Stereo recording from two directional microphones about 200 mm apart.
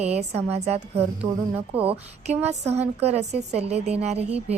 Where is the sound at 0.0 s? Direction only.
35° right (ahead or behind).